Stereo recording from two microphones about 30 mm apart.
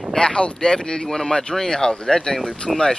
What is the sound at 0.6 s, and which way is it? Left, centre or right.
Speech, left.